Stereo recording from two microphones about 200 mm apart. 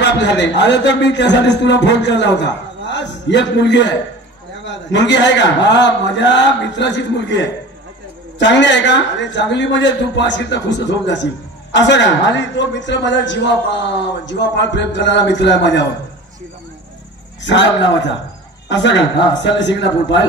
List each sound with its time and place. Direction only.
0.0 s a man's voice: 60° left (ahead or behind)
17.4 s a man's voice: 65° left (ahead or behind)